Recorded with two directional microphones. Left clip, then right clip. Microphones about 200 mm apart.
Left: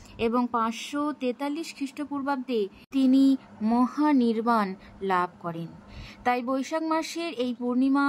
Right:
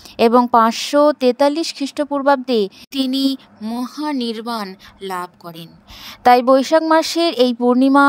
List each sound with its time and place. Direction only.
0.2 s speech: 50° right (ahead or behind)
5.0 s a woman's voice: centre (ahead or behind)
5.6 s speech: 55° right (ahead or behind)